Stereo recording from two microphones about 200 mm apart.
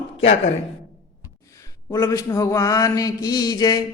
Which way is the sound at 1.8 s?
15° left (ahead or behind).